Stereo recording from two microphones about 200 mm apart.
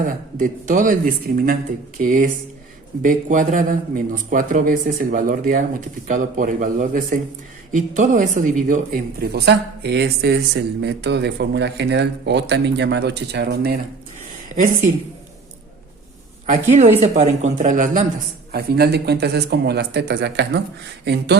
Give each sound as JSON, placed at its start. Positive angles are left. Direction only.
{"t": 0.0, "sound": "speech", "side_deg": -40}
{"t": 16.5, "sound": "speech", "side_deg": -35}
{"t": 18.5, "sound": "speech", "side_deg": -55}